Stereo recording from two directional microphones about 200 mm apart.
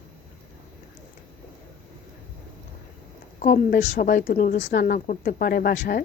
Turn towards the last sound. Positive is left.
turn(degrees=50)  # may be behind; listen again after turning